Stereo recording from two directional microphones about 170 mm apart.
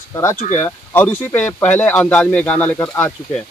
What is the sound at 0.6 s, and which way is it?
Speech, 10° left (ahead or behind).